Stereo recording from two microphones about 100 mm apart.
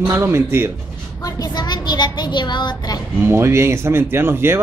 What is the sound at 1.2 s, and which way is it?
A woman's voice, 40° left (ahead or behind).